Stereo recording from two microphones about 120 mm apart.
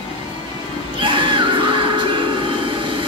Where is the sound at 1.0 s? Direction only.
45° right (ahead or behind).